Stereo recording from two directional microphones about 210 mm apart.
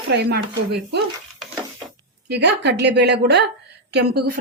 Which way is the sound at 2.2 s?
55° right (ahead or behind).